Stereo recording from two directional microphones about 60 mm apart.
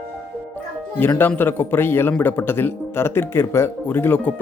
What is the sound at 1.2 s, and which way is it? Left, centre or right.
Speech, left.